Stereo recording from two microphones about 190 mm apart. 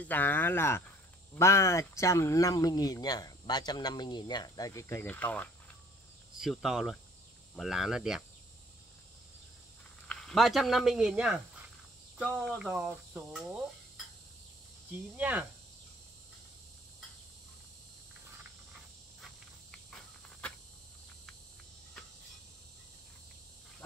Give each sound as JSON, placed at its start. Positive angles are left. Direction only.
{"t": 0.0, "sound": "speech", "side_deg": 10}
{"t": 6.3, "sound": "speech", "side_deg": 0}
{"t": 10.0, "sound": "speech", "side_deg": 0}
{"t": 14.9, "sound": "speech", "side_deg": -10}